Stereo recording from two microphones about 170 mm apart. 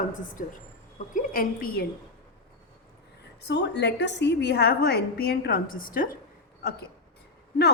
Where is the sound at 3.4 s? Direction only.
90° left; by 6.1 s 55° left (ahead or behind).